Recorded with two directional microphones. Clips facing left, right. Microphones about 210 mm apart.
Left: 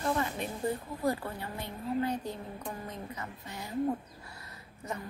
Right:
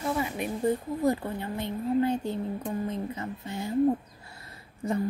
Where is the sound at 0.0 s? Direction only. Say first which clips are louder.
Right 2 dB; 10° right (ahead or behind).